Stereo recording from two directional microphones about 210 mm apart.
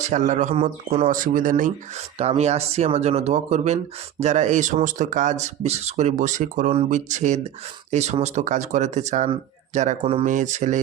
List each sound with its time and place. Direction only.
0.0 s speech: 35° right (ahead or behind)